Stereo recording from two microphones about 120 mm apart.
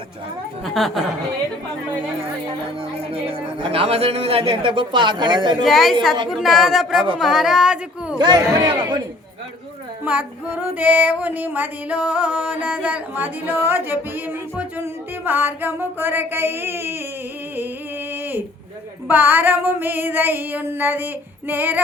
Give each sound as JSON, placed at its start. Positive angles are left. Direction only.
{"t": 0.6, "sound": "speech", "side_deg": 0}
{"t": 3.0, "sound": "a man's voice", "side_deg": -50}
{"t": 5.6, "sound": "speech", "side_deg": 0}
{"t": 8.2, "sound": "speech", "side_deg": -35}
{"t": 10.0, "sound": "female singing", "side_deg": -15}
{"t": 18.1, "sound": "a sound", "side_deg": -15}
{"t": 19.0, "sound": "female singing", "side_deg": -15}